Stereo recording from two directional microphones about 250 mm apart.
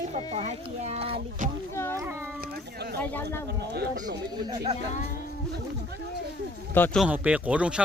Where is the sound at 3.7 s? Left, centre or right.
Right.